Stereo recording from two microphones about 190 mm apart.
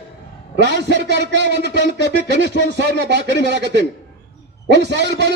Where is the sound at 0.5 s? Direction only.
65° right (ahead or behind).